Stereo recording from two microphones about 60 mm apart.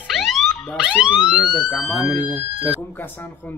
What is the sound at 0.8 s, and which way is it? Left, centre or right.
Speech, centre.